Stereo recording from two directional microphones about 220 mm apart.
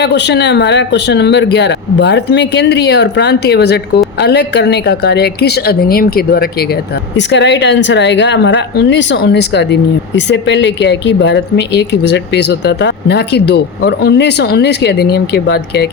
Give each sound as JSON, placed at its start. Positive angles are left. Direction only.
{"t": 0.0, "sound": "speech", "side_deg": 50}